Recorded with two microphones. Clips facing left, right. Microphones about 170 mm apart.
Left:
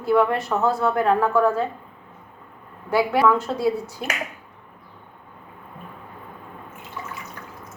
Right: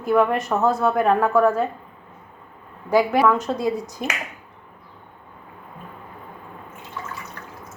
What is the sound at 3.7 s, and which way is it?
Speech, 40° right (ahead or behind).